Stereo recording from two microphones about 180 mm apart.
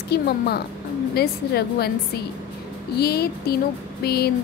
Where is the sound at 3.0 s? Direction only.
60° left (ahead or behind).